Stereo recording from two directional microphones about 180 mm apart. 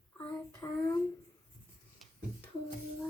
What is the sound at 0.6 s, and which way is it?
Speech, 10° left (ahead or behind).